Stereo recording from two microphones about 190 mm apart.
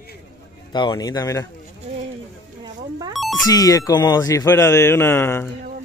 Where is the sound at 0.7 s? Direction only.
20° left (ahead or behind).